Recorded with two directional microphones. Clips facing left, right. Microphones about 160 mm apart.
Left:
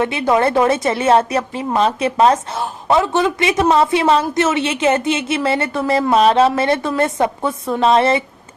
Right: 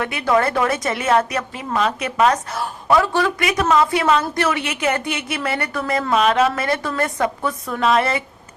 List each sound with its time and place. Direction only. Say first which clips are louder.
0.0 s a woman's voice: left 3 dB; 25° left (ahead or behind)